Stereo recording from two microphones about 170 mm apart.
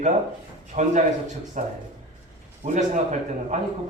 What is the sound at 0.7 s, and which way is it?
A man's voice, 45° right (ahead or behind).